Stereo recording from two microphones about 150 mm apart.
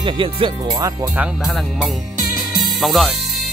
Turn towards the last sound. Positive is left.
turn(degrees=0)  # may be behind; listen again after turning